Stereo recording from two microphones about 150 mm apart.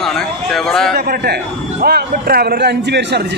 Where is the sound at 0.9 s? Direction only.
90° right.